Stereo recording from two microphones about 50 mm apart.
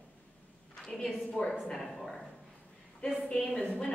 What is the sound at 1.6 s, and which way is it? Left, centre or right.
Speech, centre.